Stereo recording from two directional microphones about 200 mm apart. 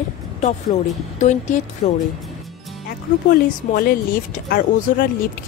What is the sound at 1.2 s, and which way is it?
Speech, 35° left (ahead or behind).